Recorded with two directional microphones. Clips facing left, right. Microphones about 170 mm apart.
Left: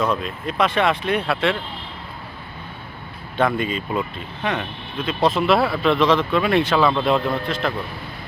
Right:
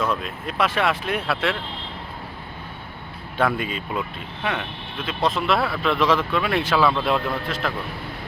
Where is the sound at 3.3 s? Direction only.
5° right (ahead or behind).